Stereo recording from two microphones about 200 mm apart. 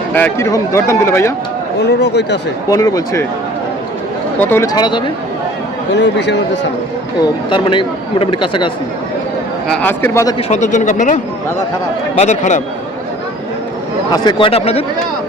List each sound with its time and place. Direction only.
0.1 s speech: 10° left (ahead or behind)
1.8 s speech: 55° left (ahead or behind)
2.6 s speech: 15° left (ahead or behind)
4.4 s speech: 10° left (ahead or behind)
5.9 s speech: 60° left (ahead or behind)
7.5 s speech: 25° left (ahead or behind)
9.6 s speech: 5° left (ahead or behind)
10.3 s speech: 35° left (ahead or behind)
12.2 s speech: 35° left (ahead or behind)
14.1 s speech: 25° left (ahead or behind)